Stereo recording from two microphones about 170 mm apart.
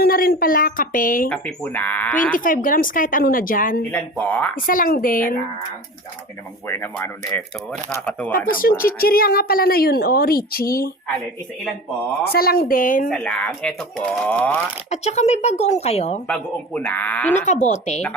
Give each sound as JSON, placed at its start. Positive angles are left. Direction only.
{"t": 0.0, "sound": "a woman's voice", "side_deg": 60}
{"t": 1.3, "sound": "speech", "side_deg": 5}
{"t": 2.3, "sound": "a woman's voice", "side_deg": 55}
{"t": 3.9, "sound": "speech", "side_deg": 10}
{"t": 4.5, "sound": "a woman's voice", "side_deg": 55}
{"t": 6.7, "sound": "speech", "side_deg": 10}
{"t": 8.4, "sound": "a woman's voice", "side_deg": 55}
{"t": 12.3, "sound": "a woman's voice", "side_deg": 60}
{"t": 13.1, "sound": "speech", "side_deg": 5}
{"t": 14.8, "sound": "speech", "side_deg": 40}
{"t": 16.2, "sound": "speech", "side_deg": 10}
{"t": 17.3, "sound": "a woman's voice", "side_deg": 45}